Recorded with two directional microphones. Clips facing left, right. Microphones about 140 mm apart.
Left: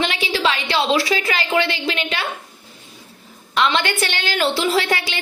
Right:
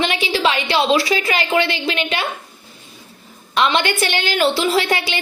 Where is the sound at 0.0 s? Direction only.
20° right (ahead or behind).